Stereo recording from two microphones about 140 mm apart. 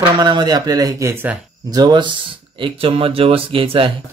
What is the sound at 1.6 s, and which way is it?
Speech, 30° right (ahead or behind).